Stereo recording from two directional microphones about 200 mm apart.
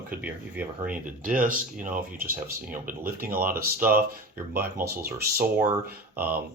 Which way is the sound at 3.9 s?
45° right (ahead or behind).